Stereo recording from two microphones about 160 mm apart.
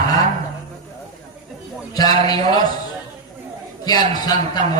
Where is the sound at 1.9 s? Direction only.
25° left (ahead or behind).